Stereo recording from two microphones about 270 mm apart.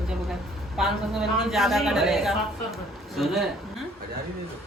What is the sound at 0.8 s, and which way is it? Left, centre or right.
Speech, centre.